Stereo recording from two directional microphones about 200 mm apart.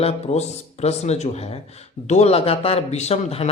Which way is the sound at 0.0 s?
30° left (ahead or behind).